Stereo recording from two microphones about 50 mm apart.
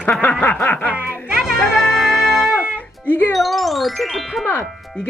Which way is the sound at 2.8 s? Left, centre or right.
Left.